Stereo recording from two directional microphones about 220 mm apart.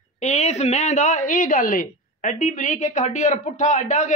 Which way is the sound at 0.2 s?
30° left (ahead or behind).